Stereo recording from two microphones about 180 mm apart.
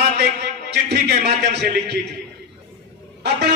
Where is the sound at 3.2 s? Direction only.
70° right (ahead or behind).